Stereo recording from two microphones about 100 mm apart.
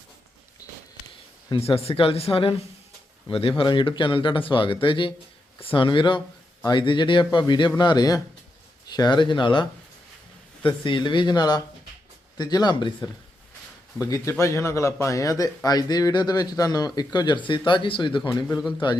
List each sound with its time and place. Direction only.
0.6 s a sound: 35° left (ahead or behind)
1.5 s speech: 80° left; by 12.9 s 45° left (ahead or behind)
14.0 s speech: 30° left (ahead or behind); by 18.2 s 55° left (ahead or behind)